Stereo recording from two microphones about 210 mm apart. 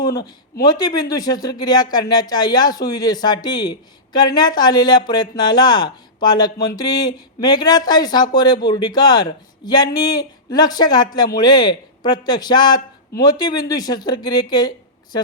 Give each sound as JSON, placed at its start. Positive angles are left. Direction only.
{"t": 0.0, "sound": "speech", "side_deg": 20}